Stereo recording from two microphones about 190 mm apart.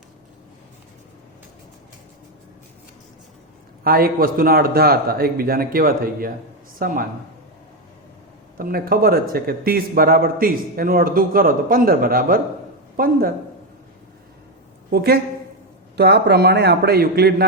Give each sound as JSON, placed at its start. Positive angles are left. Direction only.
{"t": 3.8, "sound": "a man's voice", "side_deg": -50}
{"t": 8.5, "sound": "a man's voice", "side_deg": -50}
{"t": 14.8, "sound": "a woman's voice", "side_deg": -55}